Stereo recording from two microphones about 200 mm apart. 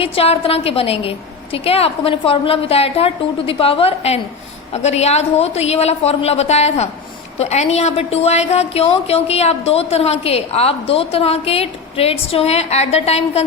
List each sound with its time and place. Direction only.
0.0 s a woman's voice: 30° left (ahead or behind)